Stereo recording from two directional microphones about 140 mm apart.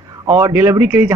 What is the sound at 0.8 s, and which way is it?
Speech, 15° right (ahead or behind).